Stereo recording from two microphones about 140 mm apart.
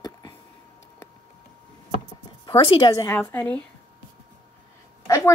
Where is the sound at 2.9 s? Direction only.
20° left (ahead or behind).